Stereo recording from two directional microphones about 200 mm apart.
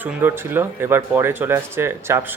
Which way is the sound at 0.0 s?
10° right (ahead or behind).